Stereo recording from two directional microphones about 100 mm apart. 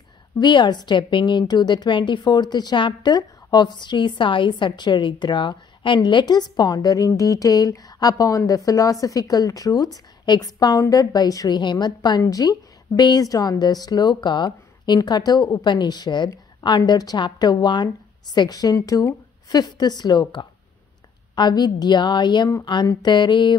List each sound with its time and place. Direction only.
0.4 s a woman's voice: 50° left (ahead or behind)
12.2 s a woman's voice: 35° left (ahead or behind)